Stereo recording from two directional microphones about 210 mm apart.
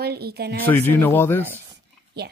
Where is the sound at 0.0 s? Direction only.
50° right (ahead or behind).